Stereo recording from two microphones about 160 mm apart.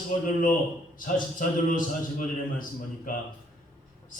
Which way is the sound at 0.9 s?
60° left (ahead or behind).